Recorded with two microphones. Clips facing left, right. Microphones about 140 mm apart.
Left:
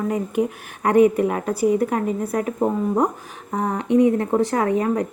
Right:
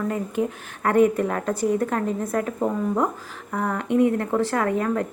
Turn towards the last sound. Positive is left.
turn(degrees=15)  # may be behind; listen again after turning